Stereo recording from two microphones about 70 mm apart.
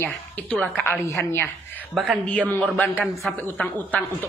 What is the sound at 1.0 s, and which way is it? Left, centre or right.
Speech, left.